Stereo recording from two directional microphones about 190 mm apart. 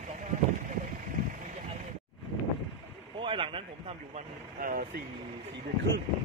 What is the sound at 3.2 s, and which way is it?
Speech, 25° right (ahead or behind).